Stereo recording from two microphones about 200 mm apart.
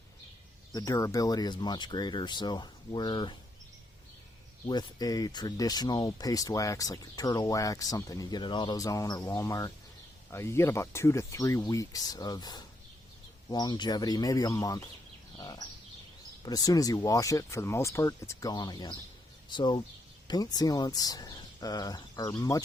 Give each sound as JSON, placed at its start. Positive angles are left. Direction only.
{"t": 0.7, "sound": "speech", "side_deg": 15}
{"t": 4.6, "sound": "speech", "side_deg": 20}
{"t": 15.4, "sound": "bird", "side_deg": 20}
{"t": 16.5, "sound": "speech", "side_deg": 20}